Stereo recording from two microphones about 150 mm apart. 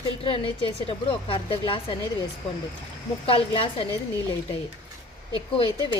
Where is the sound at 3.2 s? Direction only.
35° left (ahead or behind).